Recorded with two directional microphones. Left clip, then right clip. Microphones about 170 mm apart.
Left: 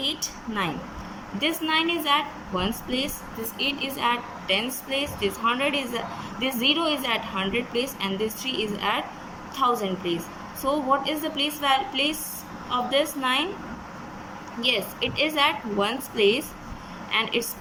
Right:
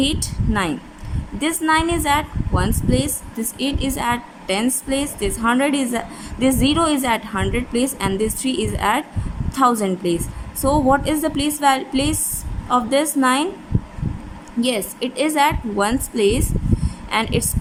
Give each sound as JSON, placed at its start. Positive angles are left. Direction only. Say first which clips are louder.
{"t": 0.0, "sound": "a woman's voice", "louder": "right 6 dB", "side_deg": -55}
{"t": 14.6, "sound": "a woman's voice", "louder": "right 3 dB", "side_deg": -45}